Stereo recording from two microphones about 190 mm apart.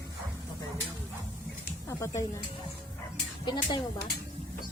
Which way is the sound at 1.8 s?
15° left (ahead or behind).